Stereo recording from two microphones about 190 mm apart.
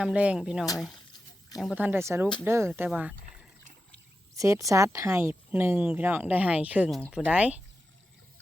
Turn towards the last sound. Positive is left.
turn(degrees=-5)  # may be behind; listen again after turning